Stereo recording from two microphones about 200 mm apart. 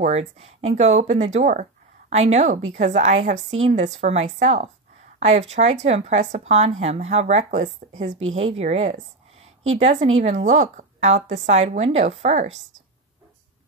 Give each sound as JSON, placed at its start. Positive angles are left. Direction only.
{"t": 0.0, "sound": "speech", "side_deg": -35}
{"t": 8.2, "sound": "speech", "side_deg": -80}
{"t": 8.5, "sound": "speech", "side_deg": -30}